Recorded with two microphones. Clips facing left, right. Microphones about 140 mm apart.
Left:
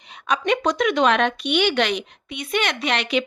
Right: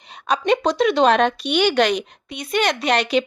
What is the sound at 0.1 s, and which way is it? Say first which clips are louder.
A woman's voice: right 3 dB; 35° right (ahead or behind).